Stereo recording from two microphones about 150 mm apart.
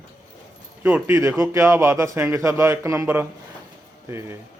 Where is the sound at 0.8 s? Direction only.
15° right (ahead or behind).